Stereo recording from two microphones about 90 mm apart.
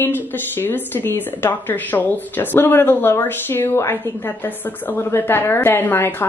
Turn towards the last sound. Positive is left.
turn(degrees=25)  # may be behind; listen again after turning